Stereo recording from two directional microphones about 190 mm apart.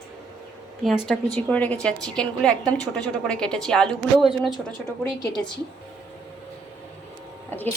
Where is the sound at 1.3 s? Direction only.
5° left (ahead or behind).